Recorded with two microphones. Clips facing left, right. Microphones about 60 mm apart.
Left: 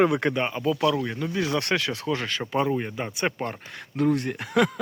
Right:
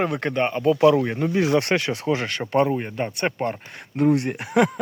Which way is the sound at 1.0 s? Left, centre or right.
Right.